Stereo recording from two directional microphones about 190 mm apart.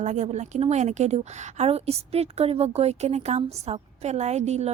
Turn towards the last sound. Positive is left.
turn(degrees=-35)  # may be behind; listen again after turning